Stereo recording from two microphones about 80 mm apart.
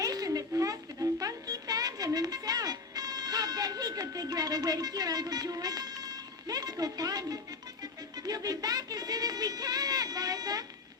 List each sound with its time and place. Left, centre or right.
0.0 s a sound: right
1.2 s music: right
8.1 s speech: right